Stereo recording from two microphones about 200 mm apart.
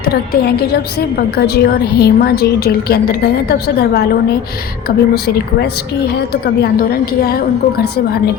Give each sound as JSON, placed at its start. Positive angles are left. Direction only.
{"t": 0.0, "sound": "a woman's voice", "side_deg": 50}